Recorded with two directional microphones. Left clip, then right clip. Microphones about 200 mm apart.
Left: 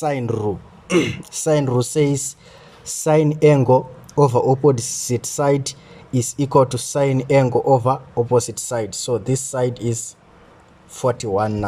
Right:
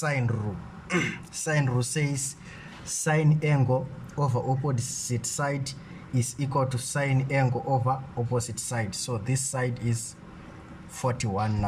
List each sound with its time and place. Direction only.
0.0 s speech: 25° left (ahead or behind)